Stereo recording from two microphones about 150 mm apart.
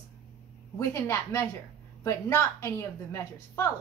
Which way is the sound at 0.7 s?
15° left (ahead or behind).